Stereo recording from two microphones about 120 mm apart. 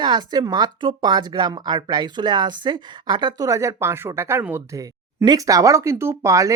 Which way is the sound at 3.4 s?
25° right (ahead or behind).